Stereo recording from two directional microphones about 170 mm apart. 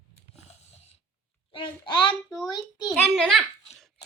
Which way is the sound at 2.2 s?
5° left (ahead or behind).